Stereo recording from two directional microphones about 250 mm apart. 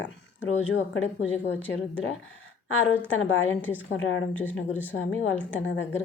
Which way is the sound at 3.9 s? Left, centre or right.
Left.